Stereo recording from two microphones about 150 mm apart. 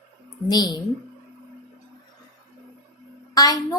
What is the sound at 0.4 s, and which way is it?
Speech, 25° left (ahead or behind).